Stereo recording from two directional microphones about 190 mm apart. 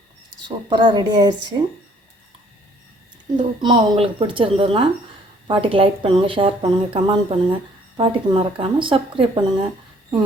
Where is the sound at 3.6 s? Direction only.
25° right (ahead or behind).